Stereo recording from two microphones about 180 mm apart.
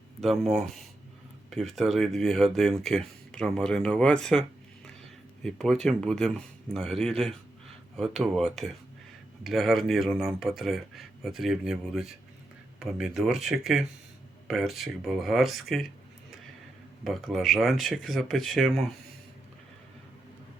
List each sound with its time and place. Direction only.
0.2 s speech: centre (ahead or behind)
17.0 s speech: centre (ahead or behind)